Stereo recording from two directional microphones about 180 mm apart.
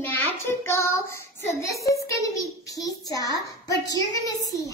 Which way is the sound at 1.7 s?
15° left (ahead or behind).